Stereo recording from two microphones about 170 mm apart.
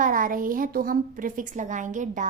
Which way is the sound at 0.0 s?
55° right (ahead or behind).